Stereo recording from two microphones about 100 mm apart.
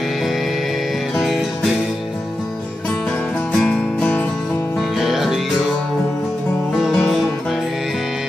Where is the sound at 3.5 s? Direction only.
5° left (ahead or behind).